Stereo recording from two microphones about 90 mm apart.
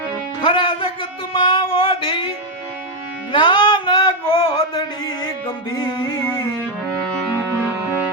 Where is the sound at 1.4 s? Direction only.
75° left (ahead or behind).